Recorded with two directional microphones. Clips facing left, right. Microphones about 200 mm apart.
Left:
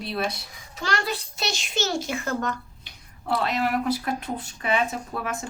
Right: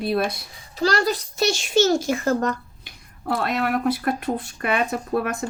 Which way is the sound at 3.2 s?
55° right (ahead or behind).